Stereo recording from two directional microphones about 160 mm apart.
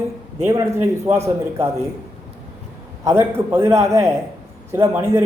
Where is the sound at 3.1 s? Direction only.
15° right (ahead or behind).